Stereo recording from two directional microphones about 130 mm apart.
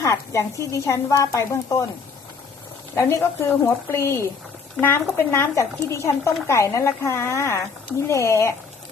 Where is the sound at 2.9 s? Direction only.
20° left (ahead or behind).